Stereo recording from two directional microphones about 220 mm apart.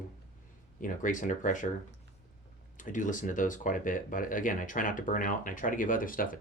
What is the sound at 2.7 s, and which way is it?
Speech, 35° left (ahead or behind).